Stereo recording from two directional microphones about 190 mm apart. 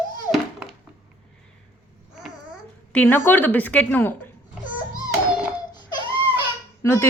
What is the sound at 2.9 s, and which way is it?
A woman's voice, 10° left (ahead or behind).